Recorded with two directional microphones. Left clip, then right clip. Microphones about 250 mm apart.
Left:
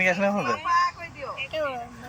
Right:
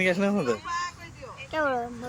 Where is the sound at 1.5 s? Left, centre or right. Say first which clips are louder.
Right 4 dB; centre.